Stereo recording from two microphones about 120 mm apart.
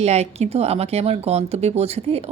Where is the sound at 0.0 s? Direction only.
65° right (ahead or behind).